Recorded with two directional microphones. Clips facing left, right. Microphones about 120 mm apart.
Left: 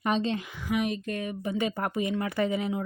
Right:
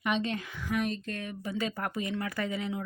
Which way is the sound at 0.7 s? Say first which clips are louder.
Left 3 dB; 10° left (ahead or behind).